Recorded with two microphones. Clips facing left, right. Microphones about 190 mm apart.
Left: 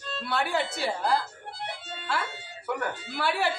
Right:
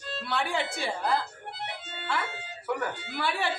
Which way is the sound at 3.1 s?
5° left (ahead or behind).